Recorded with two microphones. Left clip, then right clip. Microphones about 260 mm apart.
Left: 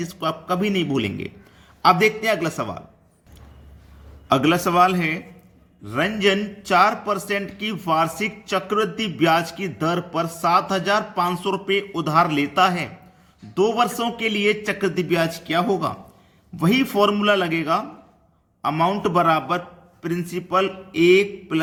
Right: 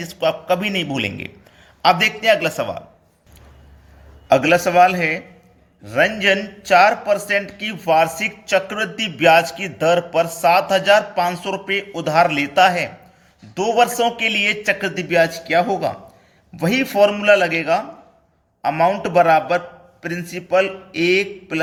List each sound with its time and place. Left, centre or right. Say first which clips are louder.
0.0 s a man's voice: right 6 dB; centre
4.3 s a man's voice: right 4 dB; centre